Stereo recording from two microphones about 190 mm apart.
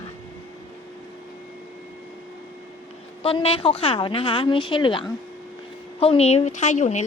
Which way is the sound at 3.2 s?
30° left (ahead or behind).